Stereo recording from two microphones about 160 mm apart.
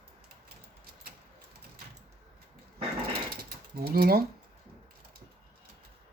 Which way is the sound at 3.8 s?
70° right (ahead or behind).